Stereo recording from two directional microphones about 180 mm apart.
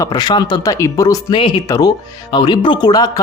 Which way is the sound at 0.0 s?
20° left (ahead or behind).